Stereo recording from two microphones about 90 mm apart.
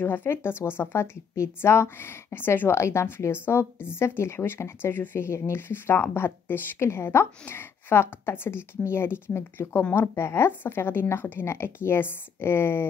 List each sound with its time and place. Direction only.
0.0 s a woman's voice: 20° left (ahead or behind)